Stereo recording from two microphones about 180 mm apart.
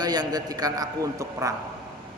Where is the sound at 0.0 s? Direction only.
25° right (ahead or behind).